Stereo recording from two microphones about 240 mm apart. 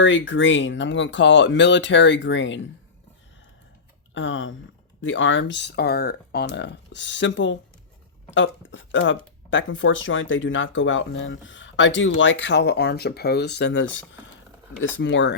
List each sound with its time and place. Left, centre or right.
0.0 s speech: left
4.1 s speech: left